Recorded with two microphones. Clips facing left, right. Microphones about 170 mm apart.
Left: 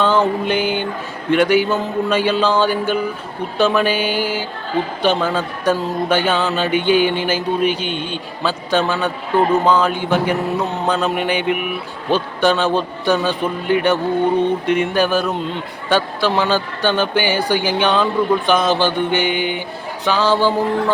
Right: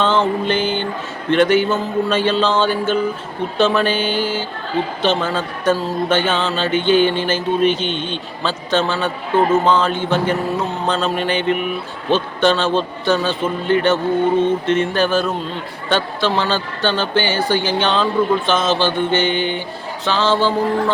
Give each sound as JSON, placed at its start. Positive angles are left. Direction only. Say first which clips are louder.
{"t": 0.0, "sound": "a man's voice", "louder": "left 1 dB", "side_deg": 10}
{"t": 9.3, "sound": "a man's voice", "louder": "even", "side_deg": -20}
{"t": 9.6, "sound": "a man's voice", "louder": "left 1 dB", "side_deg": 10}